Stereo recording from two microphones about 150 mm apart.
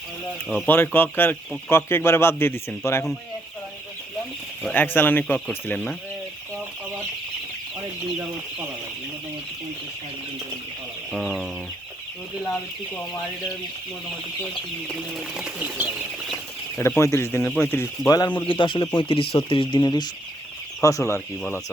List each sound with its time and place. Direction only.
0.4 s chicken: 5° right (ahead or behind)
0.7 s speech: 15° left (ahead or behind)
4.6 s speech: 15° left (ahead or behind)
11.1 s chicken: centre (ahead or behind)
14.8 s speech: centre (ahead or behind)
16.7 s speech: 15° left (ahead or behind)
17.4 s speech: 5° left (ahead or behind)
18.4 s speech: 35° left (ahead or behind)